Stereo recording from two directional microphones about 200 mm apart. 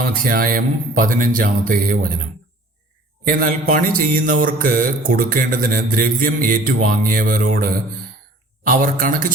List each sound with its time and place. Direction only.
0.0 s mantra: 45° right (ahead or behind)
3.2 s mantra: 45° right (ahead or behind)